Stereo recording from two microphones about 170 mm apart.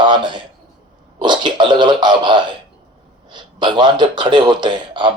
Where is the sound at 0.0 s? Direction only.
30° right (ahead or behind).